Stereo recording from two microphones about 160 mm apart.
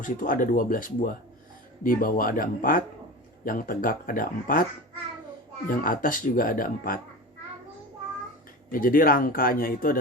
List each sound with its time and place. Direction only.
0.0 s speech: 55° left (ahead or behind)
5.6 s speech: 60° left (ahead or behind)
8.7 s speech: 60° left (ahead or behind)